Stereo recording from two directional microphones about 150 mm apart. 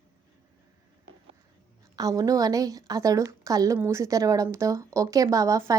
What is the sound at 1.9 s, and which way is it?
A woman's voice, 25° right (ahead or behind).